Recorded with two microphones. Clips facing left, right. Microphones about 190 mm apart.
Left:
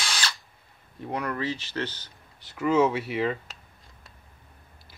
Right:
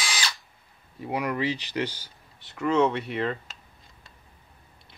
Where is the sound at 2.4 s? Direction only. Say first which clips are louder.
Left 1 dB; centre (ahead or behind).